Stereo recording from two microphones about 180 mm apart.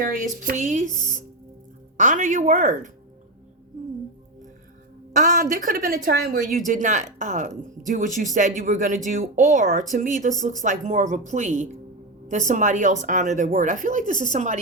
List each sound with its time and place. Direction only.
0.0 s a woman's voice: 50° right (ahead or behind)
5.1 s a woman's voice: 45° right (ahead or behind)